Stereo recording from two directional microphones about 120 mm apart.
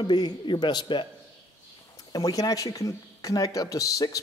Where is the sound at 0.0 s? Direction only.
40° left (ahead or behind).